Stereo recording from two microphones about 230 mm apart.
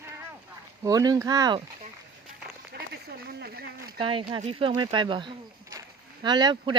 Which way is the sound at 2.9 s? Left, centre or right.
Right.